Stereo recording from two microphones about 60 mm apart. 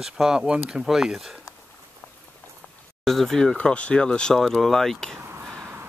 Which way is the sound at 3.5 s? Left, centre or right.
Left.